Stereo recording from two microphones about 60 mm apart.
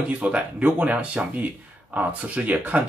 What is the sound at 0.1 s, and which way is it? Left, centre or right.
Speech, right.